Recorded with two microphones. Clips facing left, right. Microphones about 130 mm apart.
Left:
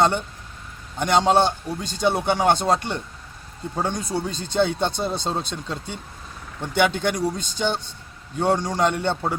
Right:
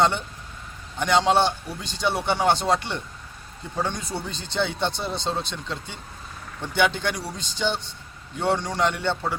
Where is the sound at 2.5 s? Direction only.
45° left (ahead or behind).